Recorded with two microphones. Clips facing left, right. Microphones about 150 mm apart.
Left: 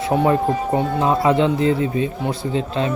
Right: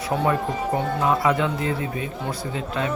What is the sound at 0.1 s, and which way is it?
Speech, 20° left (ahead or behind).